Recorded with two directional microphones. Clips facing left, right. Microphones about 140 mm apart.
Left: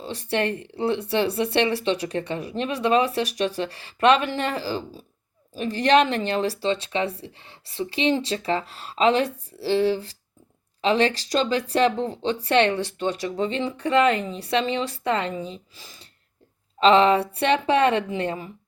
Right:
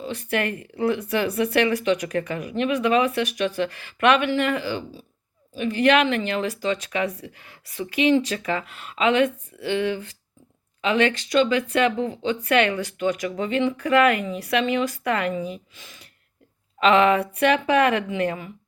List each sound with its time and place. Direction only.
0.0 s speech: 30° left (ahead or behind)